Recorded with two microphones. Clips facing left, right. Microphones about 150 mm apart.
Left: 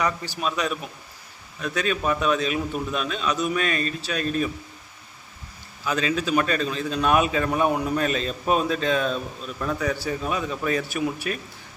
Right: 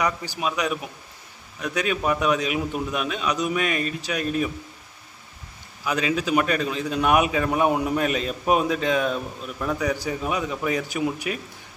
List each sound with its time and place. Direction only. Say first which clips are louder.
0.0 s a man's voice: even; 15° right (ahead or behind)
5.8 s a man's voice: even; 15° right (ahead or behind)